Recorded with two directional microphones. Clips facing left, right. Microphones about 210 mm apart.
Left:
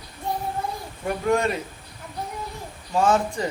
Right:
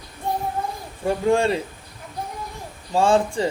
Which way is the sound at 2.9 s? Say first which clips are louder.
Right 3 dB; 30° right (ahead or behind).